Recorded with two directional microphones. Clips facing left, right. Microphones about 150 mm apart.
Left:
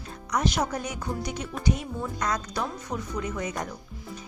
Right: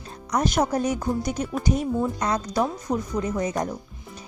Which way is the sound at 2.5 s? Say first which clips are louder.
Right 7 dB; 40° right (ahead or behind).